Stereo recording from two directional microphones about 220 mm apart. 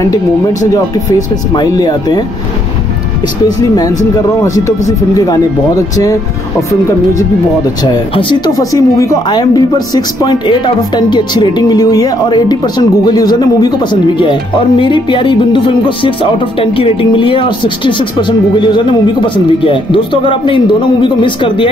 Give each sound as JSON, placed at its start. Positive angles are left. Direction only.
{"t": 0.0, "sound": "speech", "side_deg": 15}
{"t": 3.4, "sound": "speech", "side_deg": 15}
{"t": 7.8, "sound": "speech", "side_deg": 20}